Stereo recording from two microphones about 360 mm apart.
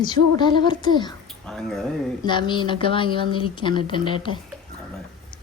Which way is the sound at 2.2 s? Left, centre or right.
Centre.